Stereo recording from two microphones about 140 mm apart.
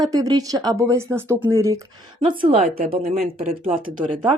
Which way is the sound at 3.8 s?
85° right.